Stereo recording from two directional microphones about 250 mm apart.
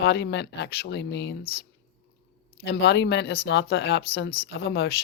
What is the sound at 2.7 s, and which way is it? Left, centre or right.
Speech, left.